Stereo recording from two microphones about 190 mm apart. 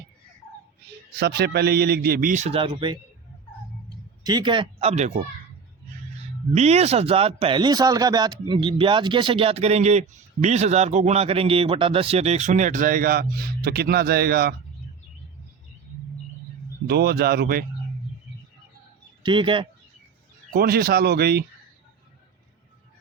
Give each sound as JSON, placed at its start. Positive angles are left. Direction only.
{"t": 1.1, "sound": "a man's voice", "side_deg": -60}
{"t": 4.2, "sound": "a man's voice", "side_deg": -20}
{"t": 16.8, "sound": "a man's voice", "side_deg": -55}
{"t": 19.2, "sound": "speech", "side_deg": -25}
{"t": 20.5, "sound": "a man's voice", "side_deg": -55}